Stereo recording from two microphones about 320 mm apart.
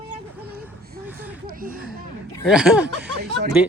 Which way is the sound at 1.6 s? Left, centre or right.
Right.